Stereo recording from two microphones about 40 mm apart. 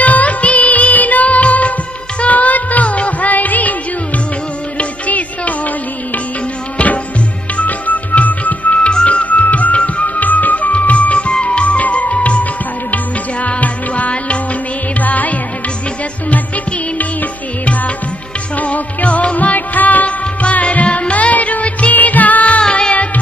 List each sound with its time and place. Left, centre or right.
0.0 s music of bollywood: left
2.1 s music: left
4.7 s music: left
6.8 s music: left
17.0 s music: left
22.6 s music: left